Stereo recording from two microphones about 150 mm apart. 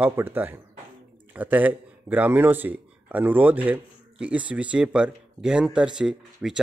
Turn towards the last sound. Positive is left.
turn(degrees=-5)  # may be behind; listen again after turning